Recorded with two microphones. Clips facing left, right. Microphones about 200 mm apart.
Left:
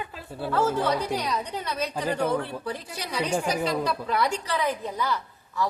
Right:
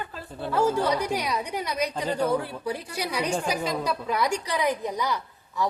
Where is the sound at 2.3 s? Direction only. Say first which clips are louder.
Right 1 dB; 10° right (ahead or behind).